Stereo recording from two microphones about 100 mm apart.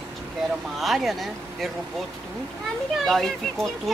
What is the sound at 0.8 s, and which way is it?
Speech, centre (ahead or behind).